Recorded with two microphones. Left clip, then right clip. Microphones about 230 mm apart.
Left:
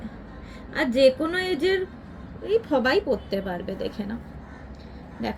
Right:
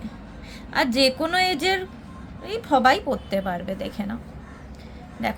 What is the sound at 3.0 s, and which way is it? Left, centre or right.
Speech, right.